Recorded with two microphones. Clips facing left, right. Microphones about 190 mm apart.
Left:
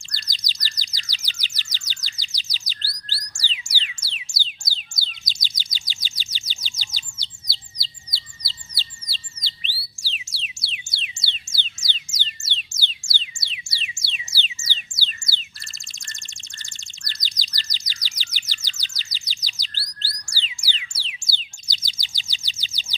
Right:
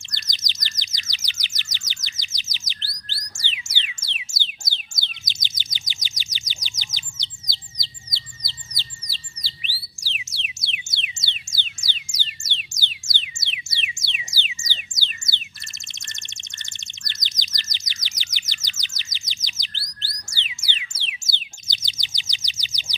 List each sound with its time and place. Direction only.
0.1 s bird: 20° right (ahead or behind)
4.0 s music: 20° right (ahead or behind)
4.9 s chirp: 20° right (ahead or behind)
12.7 s music: 15° right (ahead or behind)